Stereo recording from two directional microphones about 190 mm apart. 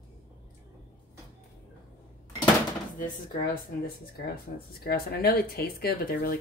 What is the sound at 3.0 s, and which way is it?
Speech, 50° left (ahead or behind).